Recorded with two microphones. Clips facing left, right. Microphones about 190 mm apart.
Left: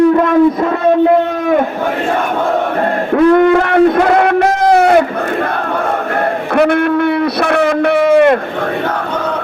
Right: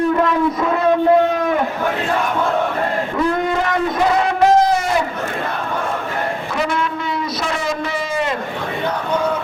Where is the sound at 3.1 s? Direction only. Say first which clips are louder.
Left 13 dB; 65° left (ahead or behind).